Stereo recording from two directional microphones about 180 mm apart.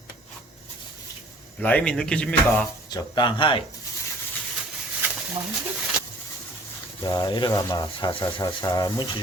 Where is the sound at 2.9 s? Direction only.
25° left (ahead or behind).